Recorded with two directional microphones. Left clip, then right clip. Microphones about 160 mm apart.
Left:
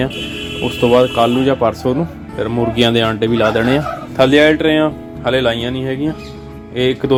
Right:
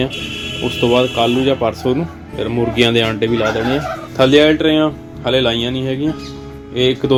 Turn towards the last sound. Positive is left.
turn(degrees=10)  # may be behind; listen again after turning